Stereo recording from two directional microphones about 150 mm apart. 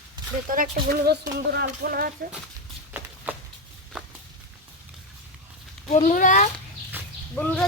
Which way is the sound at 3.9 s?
5° right (ahead or behind).